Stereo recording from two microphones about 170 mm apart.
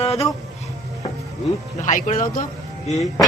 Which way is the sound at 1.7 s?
45° left (ahead or behind).